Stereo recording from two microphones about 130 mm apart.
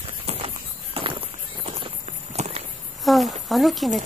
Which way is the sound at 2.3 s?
55° right (ahead or behind).